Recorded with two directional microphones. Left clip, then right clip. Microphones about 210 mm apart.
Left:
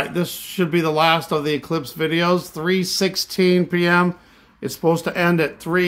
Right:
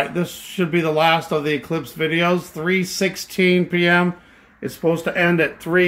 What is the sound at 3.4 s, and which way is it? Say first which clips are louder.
Speech: right 1 dB; 50° left (ahead or behind).